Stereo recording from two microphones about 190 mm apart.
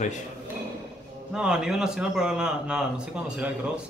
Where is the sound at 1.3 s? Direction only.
5° right (ahead or behind).